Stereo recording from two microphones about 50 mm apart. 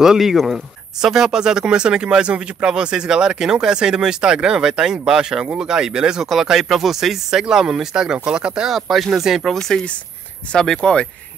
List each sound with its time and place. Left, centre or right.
0.0 s speech: centre
8.7 s speech: centre
9.5 s speech: centre